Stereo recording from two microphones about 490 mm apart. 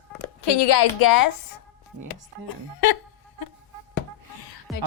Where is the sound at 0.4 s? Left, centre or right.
Left.